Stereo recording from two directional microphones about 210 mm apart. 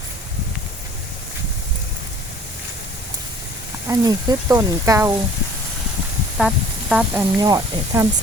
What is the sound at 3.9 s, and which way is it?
Speech, 20° right (ahead or behind).